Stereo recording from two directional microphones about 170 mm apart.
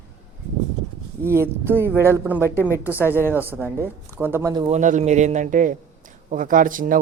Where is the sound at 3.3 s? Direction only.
15° left (ahead or behind).